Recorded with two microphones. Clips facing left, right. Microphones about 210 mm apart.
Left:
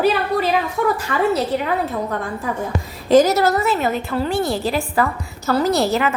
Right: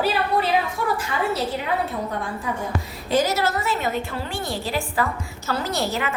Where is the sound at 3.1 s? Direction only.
40° left (ahead or behind).